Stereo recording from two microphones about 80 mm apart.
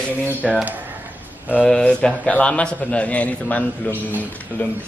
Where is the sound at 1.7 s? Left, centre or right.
Centre.